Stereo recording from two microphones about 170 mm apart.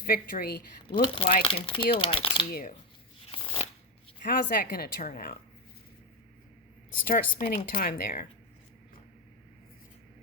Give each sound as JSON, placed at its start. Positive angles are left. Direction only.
{"t": 0.0, "sound": "speech", "side_deg": 60}
{"t": 1.0, "sound": "speech", "side_deg": 30}
{"t": 2.5, "sound": "speech", "side_deg": 60}
{"t": 3.3, "sound": "shuffling cards", "side_deg": 30}
{"t": 4.2, "sound": "speech", "side_deg": 55}
{"t": 7.1, "sound": "speech", "side_deg": 60}